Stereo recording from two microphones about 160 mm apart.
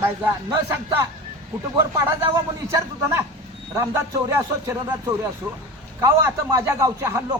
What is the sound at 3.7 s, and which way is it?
A man's voice, 15° right (ahead or behind).